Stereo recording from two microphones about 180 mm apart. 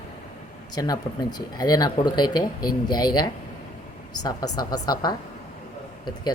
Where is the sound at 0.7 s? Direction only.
20° left (ahead or behind).